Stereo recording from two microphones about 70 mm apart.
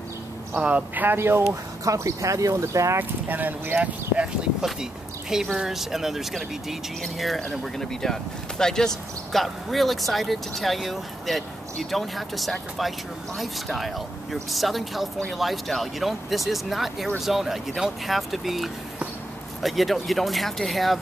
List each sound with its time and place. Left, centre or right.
0.6 s speech: centre; by 1.4 s right
1.5 s speech: right
3.0 s speech: right
4.6 s speech: centre